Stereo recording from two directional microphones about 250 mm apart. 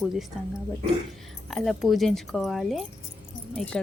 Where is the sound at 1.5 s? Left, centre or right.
Centre.